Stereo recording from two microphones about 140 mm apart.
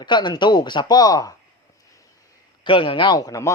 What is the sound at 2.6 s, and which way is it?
Speech, 40° left (ahead or behind).